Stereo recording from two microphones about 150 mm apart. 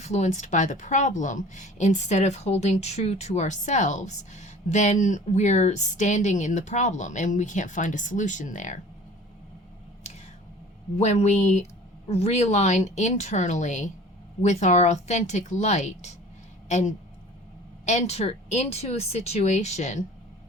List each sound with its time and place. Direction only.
0.0 s a woman's voice: 50° left (ahead or behind)
10.9 s a woman's voice: 50° left (ahead or behind)